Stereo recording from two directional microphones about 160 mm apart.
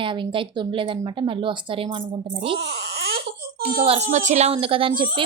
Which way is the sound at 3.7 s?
40° right (ahead or behind).